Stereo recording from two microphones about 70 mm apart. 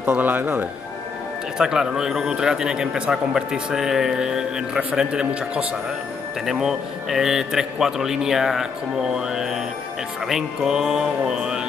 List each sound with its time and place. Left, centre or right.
0.0 s speech: right
1.6 s a man's voice: centre
6.4 s a man's voice: centre